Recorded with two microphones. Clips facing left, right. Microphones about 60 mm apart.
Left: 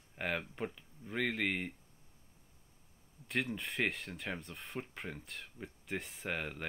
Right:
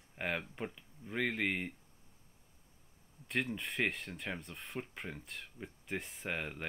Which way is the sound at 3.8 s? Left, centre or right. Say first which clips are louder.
Even; centre.